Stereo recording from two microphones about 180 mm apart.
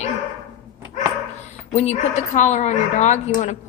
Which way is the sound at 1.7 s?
40° left (ahead or behind).